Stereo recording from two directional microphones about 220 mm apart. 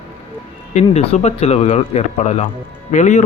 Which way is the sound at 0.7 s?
30° left (ahead or behind).